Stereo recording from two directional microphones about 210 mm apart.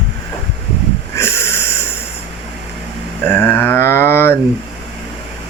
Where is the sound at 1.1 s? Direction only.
10° left (ahead or behind).